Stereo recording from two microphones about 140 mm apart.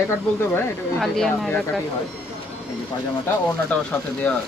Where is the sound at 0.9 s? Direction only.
Centre (ahead or behind).